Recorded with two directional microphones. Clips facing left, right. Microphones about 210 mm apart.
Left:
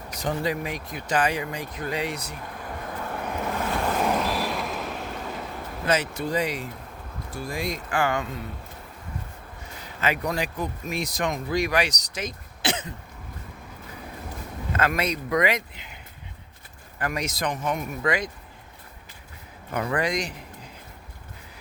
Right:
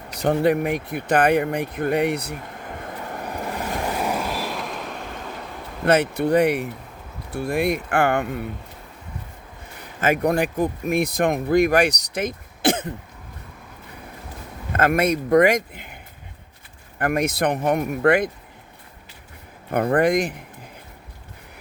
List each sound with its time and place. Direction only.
0.1 s speech: 65° right (ahead or behind)
2.4 s vehicle: 20° right (ahead or behind); by 5.5 s centre (ahead or behind)
5.8 s speech: 60° right (ahead or behind)
10.0 s speech: 50° right (ahead or behind)
14.7 s speech: 50° right (ahead or behind)
17.0 s speech: 55° right (ahead or behind)
19.7 s speech: 55° right (ahead or behind)